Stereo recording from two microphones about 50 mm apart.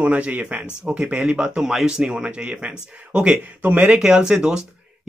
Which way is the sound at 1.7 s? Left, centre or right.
Centre.